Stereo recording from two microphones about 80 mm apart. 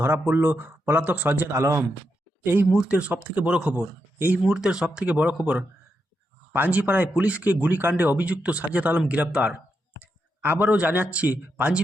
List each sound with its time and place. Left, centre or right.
0.0 s speech: right
1.5 s speech: right
2.4 s speech: right
4.4 s speech: centre
10.4 s speech: right